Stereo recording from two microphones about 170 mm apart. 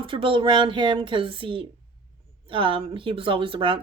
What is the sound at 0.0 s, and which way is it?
Speech, 30° right (ahead or behind).